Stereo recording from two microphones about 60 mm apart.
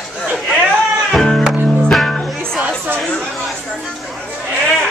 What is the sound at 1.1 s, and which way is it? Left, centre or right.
Music, centre.